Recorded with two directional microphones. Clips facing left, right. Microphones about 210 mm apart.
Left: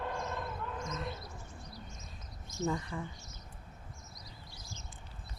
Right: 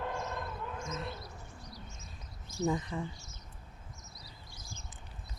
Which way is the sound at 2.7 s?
20° right (ahead or behind).